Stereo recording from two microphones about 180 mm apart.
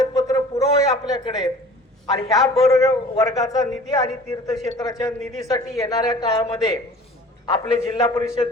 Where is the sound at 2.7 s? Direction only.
20° left (ahead or behind).